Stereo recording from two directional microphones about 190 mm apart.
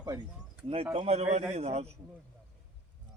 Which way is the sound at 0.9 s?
35° right (ahead or behind).